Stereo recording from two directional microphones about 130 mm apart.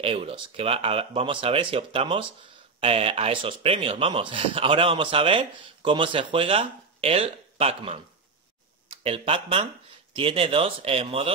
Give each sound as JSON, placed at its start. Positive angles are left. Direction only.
{"t": 0.0, "sound": "speech", "side_deg": -45}
{"t": 9.0, "sound": "speech", "side_deg": -45}